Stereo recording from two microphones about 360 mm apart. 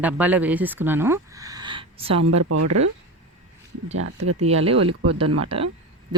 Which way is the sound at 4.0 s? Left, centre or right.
Right.